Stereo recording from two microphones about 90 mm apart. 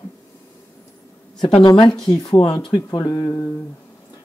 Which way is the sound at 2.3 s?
90° left.